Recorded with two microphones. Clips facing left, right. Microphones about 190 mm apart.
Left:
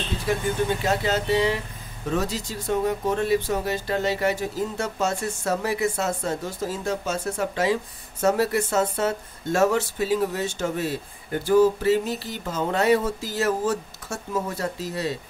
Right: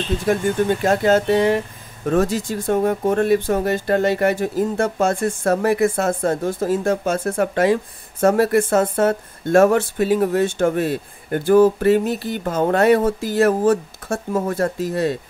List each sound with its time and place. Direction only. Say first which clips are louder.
0.8 s speech: right 7 dB; 50° right (ahead or behind)